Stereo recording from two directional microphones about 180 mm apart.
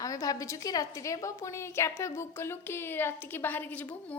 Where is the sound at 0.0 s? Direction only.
20° left (ahead or behind).